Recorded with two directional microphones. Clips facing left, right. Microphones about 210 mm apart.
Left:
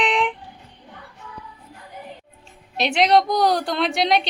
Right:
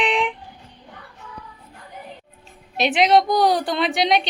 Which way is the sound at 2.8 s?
Centre (ahead or behind).